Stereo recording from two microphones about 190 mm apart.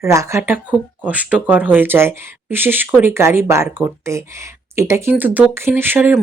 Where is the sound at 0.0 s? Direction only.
15° right (ahead or behind).